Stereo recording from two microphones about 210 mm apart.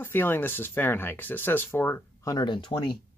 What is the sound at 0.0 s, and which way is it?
Speech, 10° left (ahead or behind).